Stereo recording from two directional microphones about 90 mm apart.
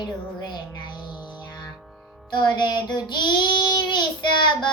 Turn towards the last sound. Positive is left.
turn(degrees=60)  # may be behind; listen again after turning